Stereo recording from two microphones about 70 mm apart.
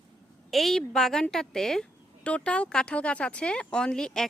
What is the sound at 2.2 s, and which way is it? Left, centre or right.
Speech, centre.